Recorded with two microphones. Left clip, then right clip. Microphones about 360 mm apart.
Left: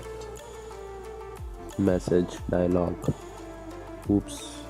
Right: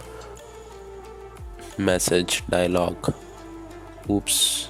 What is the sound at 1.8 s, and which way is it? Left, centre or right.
Speech, right.